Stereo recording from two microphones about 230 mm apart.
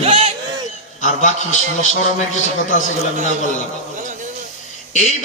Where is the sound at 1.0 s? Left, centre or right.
Left.